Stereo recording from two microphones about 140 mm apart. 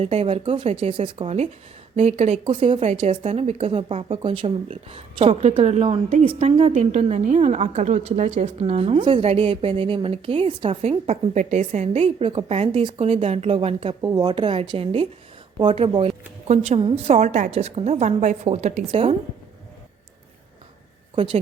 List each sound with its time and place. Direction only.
0.0 s a woman's voice: 45° right (ahead or behind)
2.5 s a woman's voice: 40° right (ahead or behind)
14.0 s a woman's voice: 25° right (ahead or behind); by 19.1 s 45° right (ahead or behind)